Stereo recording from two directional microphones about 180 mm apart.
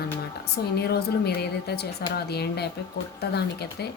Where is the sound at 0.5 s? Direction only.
60° left (ahead or behind).